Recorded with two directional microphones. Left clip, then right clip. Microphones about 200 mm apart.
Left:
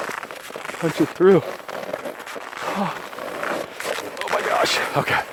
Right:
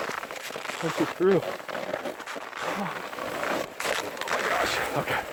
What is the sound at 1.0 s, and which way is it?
Speech, 45° left (ahead or behind).